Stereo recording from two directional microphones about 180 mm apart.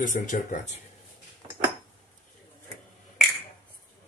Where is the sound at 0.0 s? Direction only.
45° left (ahead or behind).